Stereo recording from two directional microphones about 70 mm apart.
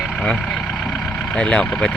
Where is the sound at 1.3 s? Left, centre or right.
Centre.